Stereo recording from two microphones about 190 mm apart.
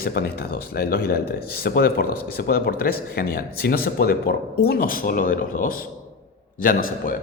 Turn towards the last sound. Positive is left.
turn(degrees=45)  # may be behind; listen again after turning